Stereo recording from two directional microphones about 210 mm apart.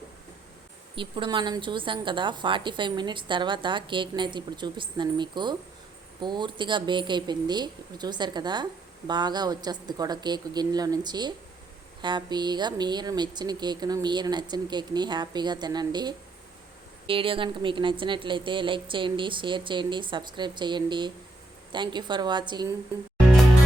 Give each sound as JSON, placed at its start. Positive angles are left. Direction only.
{"t": 0.9, "sound": "a woman's voice", "side_deg": -25}